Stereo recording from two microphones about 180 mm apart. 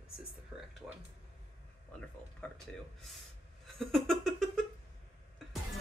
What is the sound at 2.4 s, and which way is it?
Speech, 5° left (ahead or behind).